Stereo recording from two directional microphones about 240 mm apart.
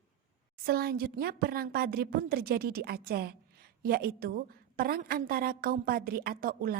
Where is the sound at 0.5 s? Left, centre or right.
Right.